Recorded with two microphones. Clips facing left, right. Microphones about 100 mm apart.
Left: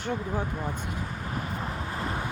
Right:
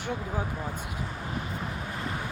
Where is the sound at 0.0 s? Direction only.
10° right (ahead or behind).